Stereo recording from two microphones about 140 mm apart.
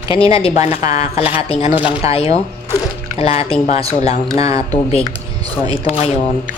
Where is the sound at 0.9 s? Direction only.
45° left (ahead or behind).